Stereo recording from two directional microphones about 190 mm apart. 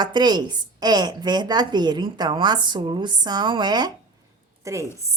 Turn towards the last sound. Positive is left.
turn(degrees=-15)  # may be behind; listen again after turning